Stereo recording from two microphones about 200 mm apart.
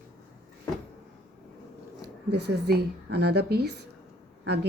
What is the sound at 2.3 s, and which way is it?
A woman's voice, 55° right (ahead or behind).